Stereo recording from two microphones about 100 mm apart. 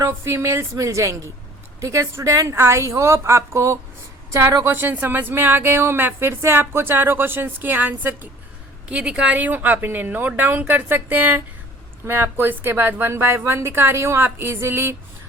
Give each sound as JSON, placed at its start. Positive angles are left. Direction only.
{"t": 0.0, "sound": "speech", "side_deg": -25}